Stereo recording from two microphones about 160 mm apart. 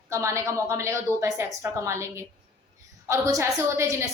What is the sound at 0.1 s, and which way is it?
A woman's voice, 20° right (ahead or behind).